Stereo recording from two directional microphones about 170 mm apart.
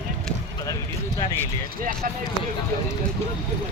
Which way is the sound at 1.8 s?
55° right (ahead or behind).